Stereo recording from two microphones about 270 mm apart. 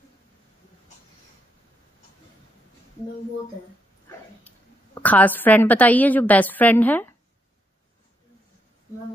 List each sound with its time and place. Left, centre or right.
4.5 s a woman's voice: centre